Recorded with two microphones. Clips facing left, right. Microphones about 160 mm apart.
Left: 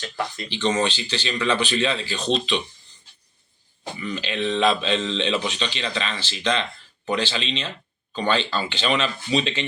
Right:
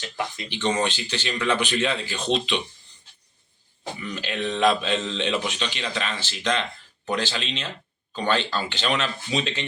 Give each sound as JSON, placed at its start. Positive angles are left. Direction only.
{"t": 0.0, "sound": "a man's voice", "side_deg": -15}
{"t": 3.9, "sound": "a man's voice", "side_deg": -5}